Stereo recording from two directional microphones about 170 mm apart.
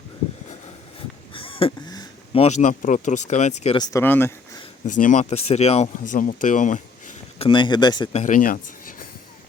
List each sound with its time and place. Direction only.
1.3 s a sound: 30° left (ahead or behind)
2.4 s speech: 45° left (ahead or behind)
4.0 s speech: 10° left (ahead or behind)
4.9 s speech: 50° left (ahead or behind)
7.4 s speech: 30° left (ahead or behind)
8.1 s speech: 50° left (ahead or behind)